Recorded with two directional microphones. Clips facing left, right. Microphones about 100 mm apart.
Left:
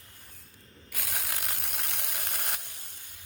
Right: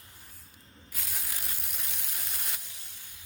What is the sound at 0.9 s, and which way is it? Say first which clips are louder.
Ratchet: left 5 dB; 70° left (ahead or behind).